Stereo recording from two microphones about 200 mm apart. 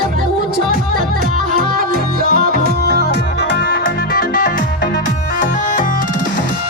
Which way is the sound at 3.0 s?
55° left (ahead or behind).